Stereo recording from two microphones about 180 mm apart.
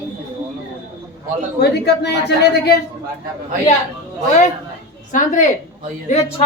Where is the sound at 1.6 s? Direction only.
70° left (ahead or behind).